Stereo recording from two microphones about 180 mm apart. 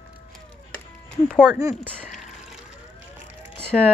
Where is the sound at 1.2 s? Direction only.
5° left (ahead or behind).